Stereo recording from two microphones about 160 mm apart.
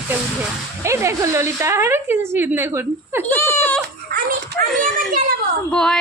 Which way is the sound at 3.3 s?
15° left (ahead or behind).